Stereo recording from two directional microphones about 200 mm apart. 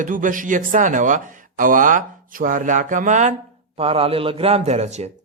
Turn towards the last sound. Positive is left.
turn(degrees=-30)  # may be behind; listen again after turning